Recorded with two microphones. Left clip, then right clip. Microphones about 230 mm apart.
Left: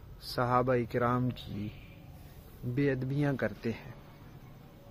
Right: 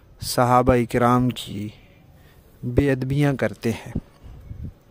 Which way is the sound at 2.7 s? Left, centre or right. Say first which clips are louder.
Right 10 dB; right.